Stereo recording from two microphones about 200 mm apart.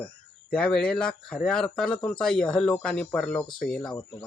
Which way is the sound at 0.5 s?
5° left (ahead or behind).